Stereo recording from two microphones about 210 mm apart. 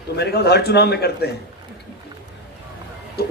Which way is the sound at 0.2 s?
50° left (ahead or behind).